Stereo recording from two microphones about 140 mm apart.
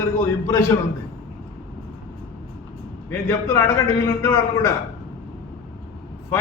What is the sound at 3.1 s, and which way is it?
A man's voice, 20° left (ahead or behind).